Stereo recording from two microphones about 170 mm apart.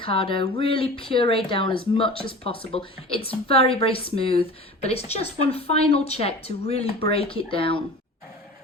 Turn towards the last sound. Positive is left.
turn(degrees=30)  # may be behind; listen again after turning